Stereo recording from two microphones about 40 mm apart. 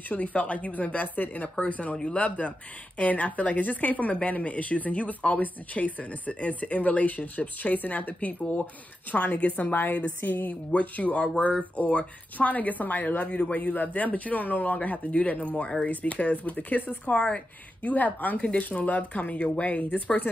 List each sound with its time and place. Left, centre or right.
0.1 s a woman's voice: left
13.3 s a woman's voice: left
13.6 s speech: left
15.1 s a woman's voice: left
17.8 s a woman's voice: left